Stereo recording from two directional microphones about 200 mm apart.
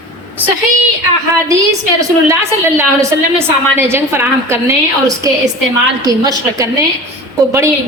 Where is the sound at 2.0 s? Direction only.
15° right (ahead or behind).